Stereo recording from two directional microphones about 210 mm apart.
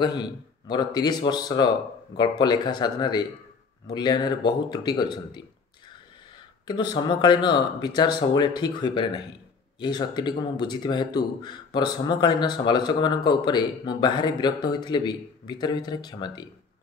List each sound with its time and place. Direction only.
0.0 s speech: 20° left (ahead or behind)
6.7 s speech: 20° left (ahead or behind)